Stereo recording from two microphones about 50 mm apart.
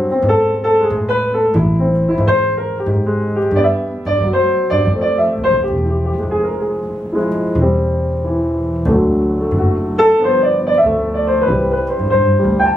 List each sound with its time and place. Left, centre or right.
0.1 s music: centre
0.4 s music: centre
1.4 s piano: centre
4.4 s music: centre
7.2 s music: centre
8.8 s music: centre
10.0 s music: centre
10.3 s music: centre
11.2 s music: centre